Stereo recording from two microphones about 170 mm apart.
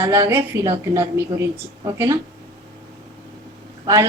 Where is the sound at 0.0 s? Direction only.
15° right (ahead or behind).